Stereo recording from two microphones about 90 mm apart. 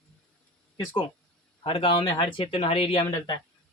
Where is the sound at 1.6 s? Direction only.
85° left.